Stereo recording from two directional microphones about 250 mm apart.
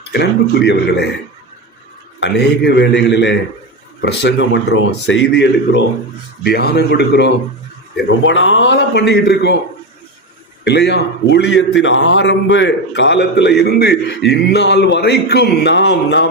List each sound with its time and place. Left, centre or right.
0.1 s a man's voice: left
2.2 s a man's voice: left
10.6 s a man's voice: left